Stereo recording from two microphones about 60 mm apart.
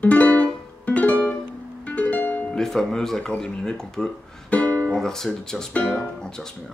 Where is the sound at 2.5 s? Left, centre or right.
Centre.